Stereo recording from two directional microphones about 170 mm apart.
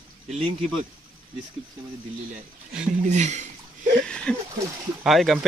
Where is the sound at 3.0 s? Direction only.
45° right (ahead or behind).